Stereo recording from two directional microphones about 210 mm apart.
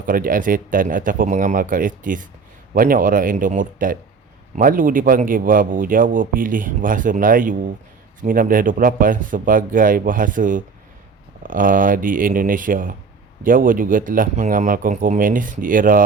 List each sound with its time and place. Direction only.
0.0 s speech: 40° right (ahead or behind)